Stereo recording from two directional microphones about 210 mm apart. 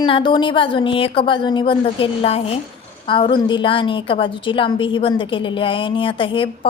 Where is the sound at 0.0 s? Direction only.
20° left (ahead or behind).